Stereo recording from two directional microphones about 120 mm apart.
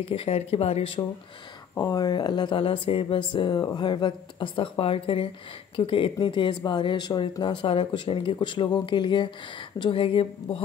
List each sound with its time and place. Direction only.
0.0 s speech: 55° left (ahead or behind)
1.9 s speech: 35° left (ahead or behind); by 10.6 s 50° left (ahead or behind)